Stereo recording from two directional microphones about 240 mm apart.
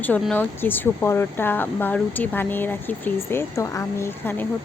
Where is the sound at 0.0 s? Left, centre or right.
Centre.